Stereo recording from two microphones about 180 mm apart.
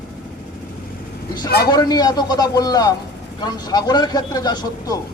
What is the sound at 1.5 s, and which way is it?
Speech, 60° left (ahead or behind).